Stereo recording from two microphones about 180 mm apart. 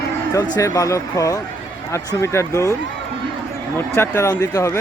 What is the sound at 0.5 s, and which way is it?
Speech, 20° left (ahead or behind).